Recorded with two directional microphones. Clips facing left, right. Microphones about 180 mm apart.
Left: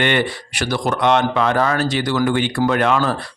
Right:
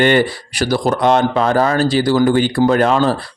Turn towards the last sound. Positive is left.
turn(degrees=-30)  # may be behind; listen again after turning